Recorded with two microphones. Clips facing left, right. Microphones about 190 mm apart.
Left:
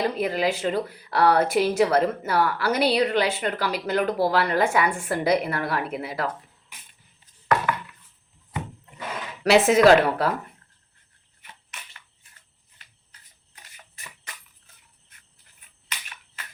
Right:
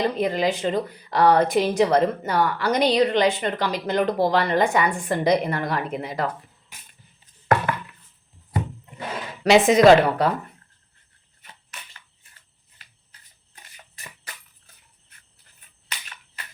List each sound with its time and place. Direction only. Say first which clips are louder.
0.0 s speech: right 2 dB; 5° left (ahead or behind)
8.5 s a sound: right 5 dB; 30° right (ahead or behind)
9.4 s speech: right 2 dB; 5° left (ahead or behind)